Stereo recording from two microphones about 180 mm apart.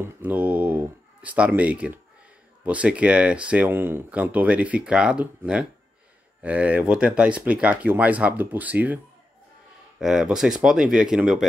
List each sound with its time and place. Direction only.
0.0 s speech: 10° right (ahead or behind)